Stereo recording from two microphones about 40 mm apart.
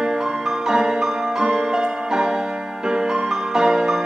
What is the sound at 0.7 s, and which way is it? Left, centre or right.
Music, centre.